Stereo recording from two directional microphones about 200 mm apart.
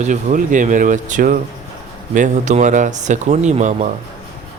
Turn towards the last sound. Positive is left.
turn(degrees=-35)  # may be behind; listen again after turning